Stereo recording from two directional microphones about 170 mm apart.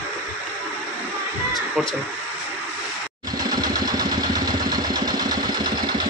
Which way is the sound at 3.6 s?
25° right (ahead or behind).